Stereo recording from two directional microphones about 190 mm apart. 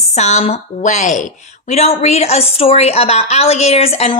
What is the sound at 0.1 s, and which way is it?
A woman's voice, 40° left (ahead or behind).